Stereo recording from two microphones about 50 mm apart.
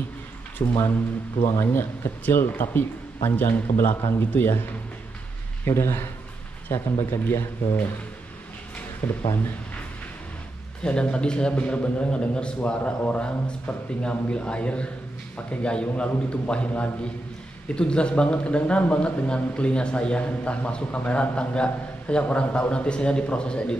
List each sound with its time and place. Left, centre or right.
1.6 s speech: left
5.7 s speech: left
6.7 s speech: left
7.2 s speech: left
9.0 s speech: left
10.8 s speech: left